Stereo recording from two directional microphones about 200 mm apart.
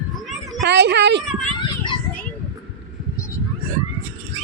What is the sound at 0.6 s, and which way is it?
Speech, 60° right (ahead or behind).